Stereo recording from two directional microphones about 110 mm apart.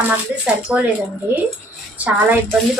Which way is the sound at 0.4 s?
10° right (ahead or behind).